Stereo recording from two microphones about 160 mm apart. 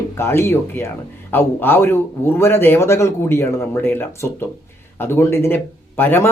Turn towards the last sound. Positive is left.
turn(degrees=15)  # may be behind; listen again after turning